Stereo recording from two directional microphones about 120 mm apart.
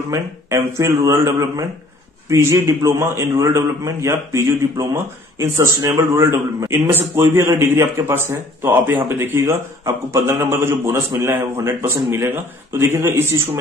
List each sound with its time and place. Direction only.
0.1 s a man's voice: 25° right (ahead or behind)